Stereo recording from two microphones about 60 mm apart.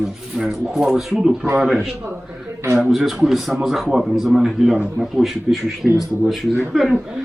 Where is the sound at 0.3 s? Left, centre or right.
Centre.